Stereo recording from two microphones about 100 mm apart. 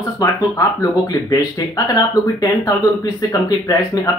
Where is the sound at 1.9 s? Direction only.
40° left (ahead or behind).